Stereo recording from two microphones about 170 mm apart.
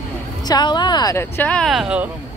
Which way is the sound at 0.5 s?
25° left (ahead or behind).